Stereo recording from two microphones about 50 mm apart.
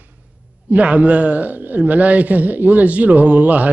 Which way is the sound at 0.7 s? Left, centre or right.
Right.